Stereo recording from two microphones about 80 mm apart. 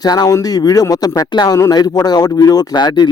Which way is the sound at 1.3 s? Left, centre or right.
Left.